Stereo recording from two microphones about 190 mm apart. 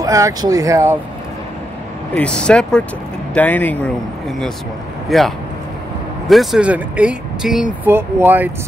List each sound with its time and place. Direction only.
0.0 s speech: 20° right (ahead or behind)
2.1 s speech: 5° left (ahead or behind)
5.1 s speech: centre (ahead or behind)